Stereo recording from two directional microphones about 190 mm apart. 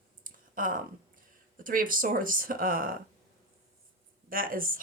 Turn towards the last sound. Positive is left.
turn(degrees=-45)  # may be behind; listen again after turning